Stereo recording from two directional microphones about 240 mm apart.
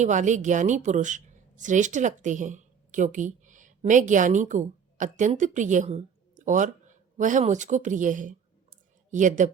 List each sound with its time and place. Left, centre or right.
0.0 s a woman's voice: right